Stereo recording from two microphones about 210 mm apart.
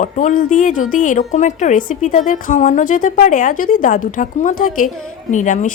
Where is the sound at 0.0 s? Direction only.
35° left (ahead or behind).